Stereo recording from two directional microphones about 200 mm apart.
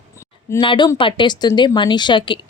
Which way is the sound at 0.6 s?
25° left (ahead or behind).